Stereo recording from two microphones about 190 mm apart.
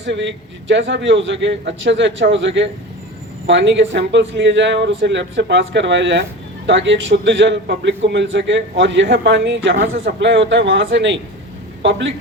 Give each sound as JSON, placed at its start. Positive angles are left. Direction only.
{"t": 0.0, "sound": "a man's voice", "side_deg": -70}